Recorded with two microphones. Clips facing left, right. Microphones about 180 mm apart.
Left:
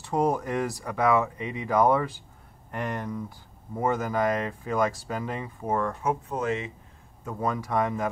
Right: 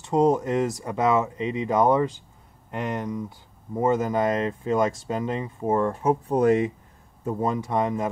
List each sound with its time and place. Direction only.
0.0 s speech: 20° right (ahead or behind); by 6.7 s 45° right (ahead or behind)
7.2 s speech: 25° right (ahead or behind)